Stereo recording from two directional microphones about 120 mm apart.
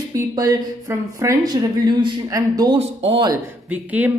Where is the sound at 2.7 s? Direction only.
50° right (ahead or behind).